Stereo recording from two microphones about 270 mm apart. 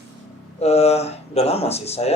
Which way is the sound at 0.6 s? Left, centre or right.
Left.